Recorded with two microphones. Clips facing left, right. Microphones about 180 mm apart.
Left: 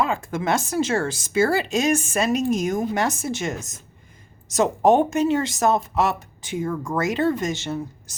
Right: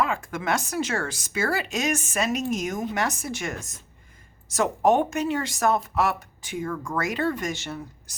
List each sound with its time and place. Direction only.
0.0 s speech: 25° left (ahead or behind)